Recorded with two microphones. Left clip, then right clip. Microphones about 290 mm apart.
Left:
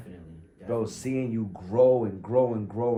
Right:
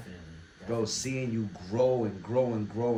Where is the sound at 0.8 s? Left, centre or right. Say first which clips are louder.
Left 2 dB; left.